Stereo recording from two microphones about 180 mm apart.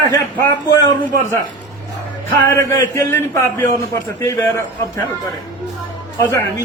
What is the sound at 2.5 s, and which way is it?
A man's voice, 15° left (ahead or behind).